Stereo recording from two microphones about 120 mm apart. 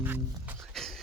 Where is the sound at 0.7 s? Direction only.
Centre (ahead or behind).